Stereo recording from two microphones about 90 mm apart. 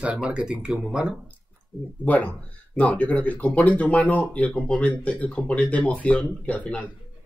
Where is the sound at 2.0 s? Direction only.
15° left (ahead or behind).